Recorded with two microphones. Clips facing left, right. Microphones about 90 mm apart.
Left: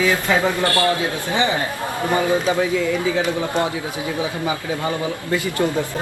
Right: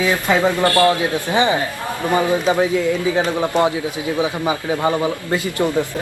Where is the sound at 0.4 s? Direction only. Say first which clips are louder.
Right 4 dB; 20° right (ahead or behind).